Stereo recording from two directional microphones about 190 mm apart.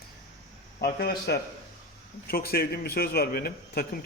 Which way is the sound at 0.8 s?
55° left (ahead or behind).